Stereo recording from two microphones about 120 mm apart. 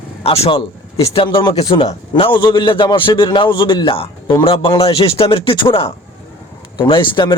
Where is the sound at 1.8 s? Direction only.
40° left (ahead or behind).